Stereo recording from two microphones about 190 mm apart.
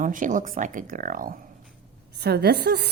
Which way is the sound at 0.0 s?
45° right (ahead or behind).